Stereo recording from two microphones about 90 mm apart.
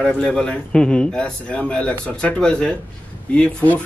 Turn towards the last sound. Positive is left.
turn(degrees=15)  # may be behind; listen again after turning